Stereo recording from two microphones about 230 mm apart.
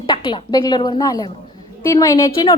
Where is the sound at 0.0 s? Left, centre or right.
Left.